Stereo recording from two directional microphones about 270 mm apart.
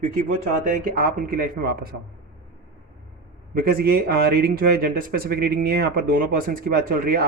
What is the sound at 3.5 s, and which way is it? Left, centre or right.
A man's voice, right.